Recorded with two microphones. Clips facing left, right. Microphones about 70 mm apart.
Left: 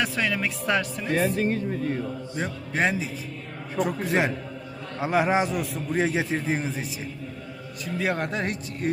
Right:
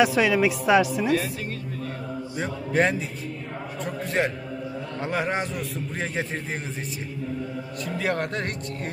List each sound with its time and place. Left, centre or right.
0.0 s speech: centre
1.4 s music: left
2.3 s a man's voice: centre
7.9 s a man's voice: centre